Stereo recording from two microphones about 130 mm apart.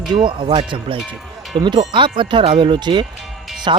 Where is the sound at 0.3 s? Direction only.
40° right (ahead or behind).